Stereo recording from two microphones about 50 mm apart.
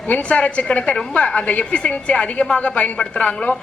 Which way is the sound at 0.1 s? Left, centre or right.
Left.